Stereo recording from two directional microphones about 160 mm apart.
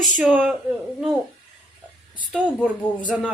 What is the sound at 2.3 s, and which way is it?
Speech, 5° right (ahead or behind).